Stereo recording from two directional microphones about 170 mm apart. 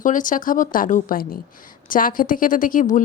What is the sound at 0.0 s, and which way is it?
A woman's voice, 50° left (ahead or behind).